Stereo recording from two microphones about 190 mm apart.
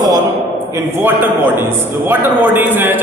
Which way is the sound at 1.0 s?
10° right (ahead or behind).